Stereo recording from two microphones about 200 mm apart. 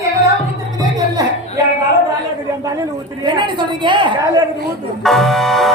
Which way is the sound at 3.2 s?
25° right (ahead or behind).